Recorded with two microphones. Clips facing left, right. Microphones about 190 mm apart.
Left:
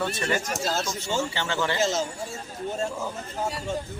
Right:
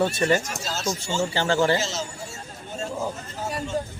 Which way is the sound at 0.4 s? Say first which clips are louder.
Left 4 dB; 50° left (ahead or behind).